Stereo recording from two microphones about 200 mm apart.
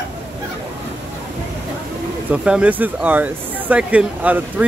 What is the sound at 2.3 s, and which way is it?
Speech, 5° right (ahead or behind).